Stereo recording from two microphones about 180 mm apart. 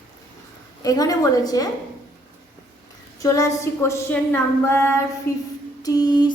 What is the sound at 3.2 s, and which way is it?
A woman's voice, 15° left (ahead or behind).